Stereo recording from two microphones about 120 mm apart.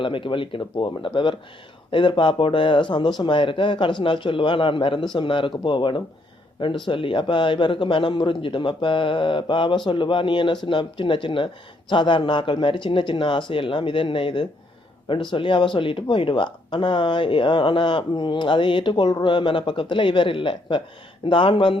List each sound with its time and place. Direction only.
0.0 s speech: 45° left (ahead or behind)